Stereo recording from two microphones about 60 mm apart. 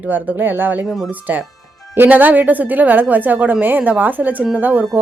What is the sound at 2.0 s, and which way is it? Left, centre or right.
A woman's voice, right.